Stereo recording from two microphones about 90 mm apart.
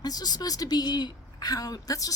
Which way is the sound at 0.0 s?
50° left (ahead or behind).